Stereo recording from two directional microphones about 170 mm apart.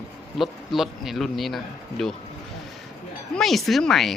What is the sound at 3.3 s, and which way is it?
Speech, centre (ahead or behind).